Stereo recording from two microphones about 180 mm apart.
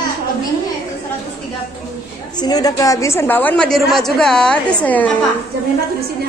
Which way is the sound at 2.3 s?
20° left (ahead or behind).